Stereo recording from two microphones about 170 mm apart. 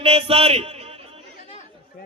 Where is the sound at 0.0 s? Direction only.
35° right (ahead or behind).